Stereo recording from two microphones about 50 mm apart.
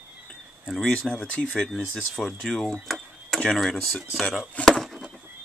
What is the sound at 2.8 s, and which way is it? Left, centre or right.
Tick-tock, centre.